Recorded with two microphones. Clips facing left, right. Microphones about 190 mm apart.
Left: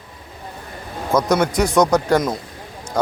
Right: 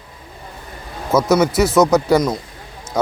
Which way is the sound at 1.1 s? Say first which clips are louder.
Right 3 dB; 5° right (ahead or behind).